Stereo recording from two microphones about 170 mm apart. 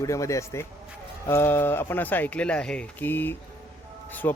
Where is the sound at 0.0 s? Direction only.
20° left (ahead or behind).